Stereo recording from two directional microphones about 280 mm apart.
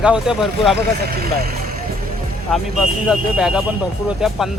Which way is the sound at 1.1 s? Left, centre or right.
Right.